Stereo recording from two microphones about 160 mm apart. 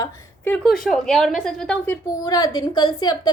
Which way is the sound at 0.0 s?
20° left (ahead or behind).